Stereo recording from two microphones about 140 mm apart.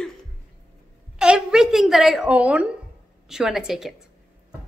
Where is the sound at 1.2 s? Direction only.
5° right (ahead or behind).